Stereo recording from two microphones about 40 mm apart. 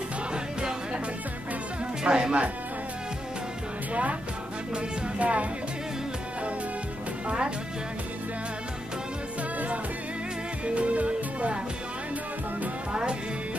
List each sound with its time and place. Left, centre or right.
0.3 s music: right
2.0 s speech: right
3.9 s speech: right
4.7 s music: right
7.2 s speech: right
10.6 s music: right